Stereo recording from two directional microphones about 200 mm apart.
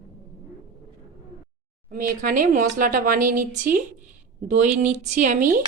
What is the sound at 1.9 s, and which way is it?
A woman's voice, 45° right (ahead or behind).